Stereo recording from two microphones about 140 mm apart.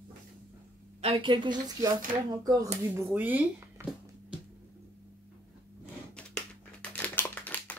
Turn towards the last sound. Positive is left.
turn(degrees=10)  # may be behind; listen again after turning